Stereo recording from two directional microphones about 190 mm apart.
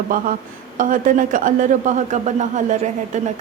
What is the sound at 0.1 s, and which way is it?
A man's voice, 45° right (ahead or behind).